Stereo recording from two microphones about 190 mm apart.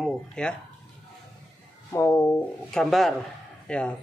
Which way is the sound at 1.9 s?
15° left (ahead or behind).